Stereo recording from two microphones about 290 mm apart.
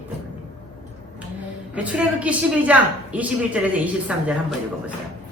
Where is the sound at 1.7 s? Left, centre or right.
Centre.